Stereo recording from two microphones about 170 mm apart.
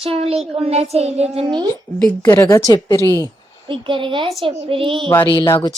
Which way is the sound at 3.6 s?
30° right (ahead or behind).